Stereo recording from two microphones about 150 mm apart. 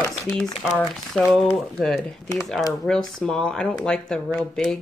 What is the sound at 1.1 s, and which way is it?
Speech, centre (ahead or behind).